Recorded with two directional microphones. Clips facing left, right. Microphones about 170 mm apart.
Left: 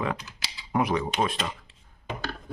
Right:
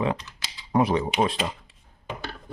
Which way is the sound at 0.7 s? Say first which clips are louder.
Right 4 dB; 30° right (ahead or behind).